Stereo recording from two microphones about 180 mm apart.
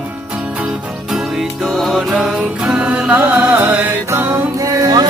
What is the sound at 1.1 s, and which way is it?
Music, centre (ahead or behind).